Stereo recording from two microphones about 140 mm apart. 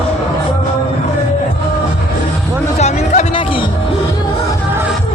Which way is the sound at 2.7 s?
55° left (ahead or behind).